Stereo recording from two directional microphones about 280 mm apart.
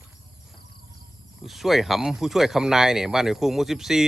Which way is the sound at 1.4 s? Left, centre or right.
Centre.